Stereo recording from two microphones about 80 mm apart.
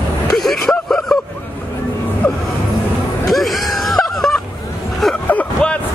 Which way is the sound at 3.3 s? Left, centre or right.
Centre.